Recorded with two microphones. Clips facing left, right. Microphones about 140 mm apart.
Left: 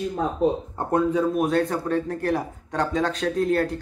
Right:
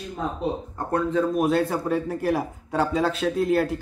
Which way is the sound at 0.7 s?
15° left (ahead or behind).